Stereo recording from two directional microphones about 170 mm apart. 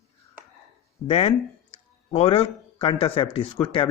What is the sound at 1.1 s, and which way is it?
Speech, 35° left (ahead or behind).